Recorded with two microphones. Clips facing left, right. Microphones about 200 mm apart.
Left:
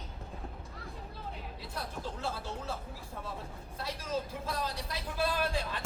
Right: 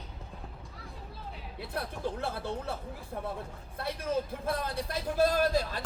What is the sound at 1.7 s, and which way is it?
A man's voice, 60° right (ahead or behind).